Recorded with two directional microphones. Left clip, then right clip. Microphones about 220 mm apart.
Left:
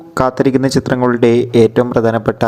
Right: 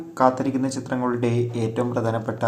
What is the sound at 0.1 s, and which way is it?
Speech, 40° left (ahead or behind).